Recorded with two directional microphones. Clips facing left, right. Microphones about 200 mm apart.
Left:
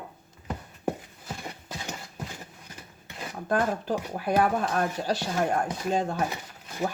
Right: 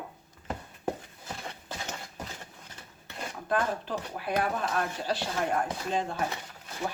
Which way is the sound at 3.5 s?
45° left (ahead or behind).